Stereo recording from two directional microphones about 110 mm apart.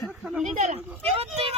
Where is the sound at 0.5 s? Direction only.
75° right (ahead or behind).